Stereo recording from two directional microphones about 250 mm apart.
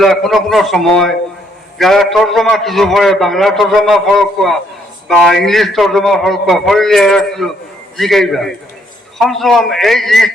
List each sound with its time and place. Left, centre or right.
0.0 s a man's voice: centre